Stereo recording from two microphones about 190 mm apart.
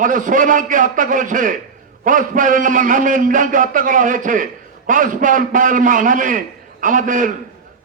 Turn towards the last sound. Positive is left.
turn(degrees=-45)  # may be behind; listen again after turning